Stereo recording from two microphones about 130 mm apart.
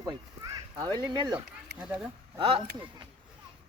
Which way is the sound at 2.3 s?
45° right (ahead or behind).